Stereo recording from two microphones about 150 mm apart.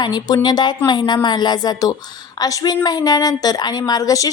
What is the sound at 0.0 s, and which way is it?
A woman's voice, 25° left (ahead or behind).